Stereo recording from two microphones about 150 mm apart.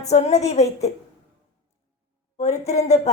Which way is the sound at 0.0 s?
50° left (ahead or behind).